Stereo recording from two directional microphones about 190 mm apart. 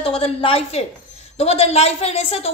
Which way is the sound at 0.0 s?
30° left (ahead or behind).